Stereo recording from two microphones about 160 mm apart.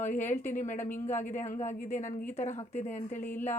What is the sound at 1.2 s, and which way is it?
Speech, 50° left (ahead or behind).